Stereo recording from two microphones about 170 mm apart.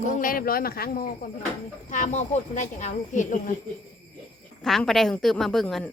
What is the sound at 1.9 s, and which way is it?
Speech, 45° left (ahead or behind).